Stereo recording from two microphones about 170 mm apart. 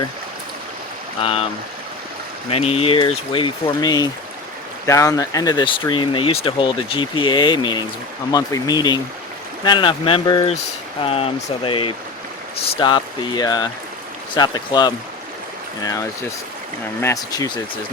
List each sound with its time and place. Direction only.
1.2 s speech: 35° left (ahead or behind)
2.5 s speech: 35° left (ahead or behind)
17.0 s speech: 20° left (ahead or behind)